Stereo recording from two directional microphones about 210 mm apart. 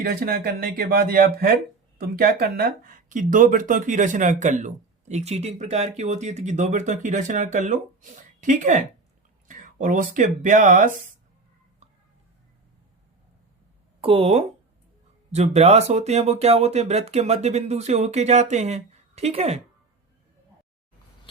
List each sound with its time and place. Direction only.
0.0 s speech: 45° right (ahead or behind)
14.0 s speech: 25° right (ahead or behind)